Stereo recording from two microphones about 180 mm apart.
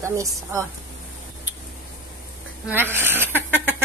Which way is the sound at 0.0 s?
15° right (ahead or behind).